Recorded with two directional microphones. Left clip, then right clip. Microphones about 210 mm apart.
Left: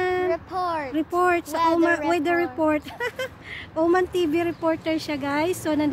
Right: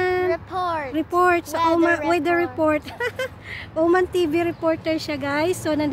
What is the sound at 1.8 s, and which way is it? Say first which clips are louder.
Speech: right 2 dB; 10° right (ahead or behind).